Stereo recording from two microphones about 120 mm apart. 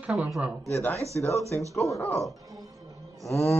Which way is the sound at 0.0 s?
5° right (ahead or behind).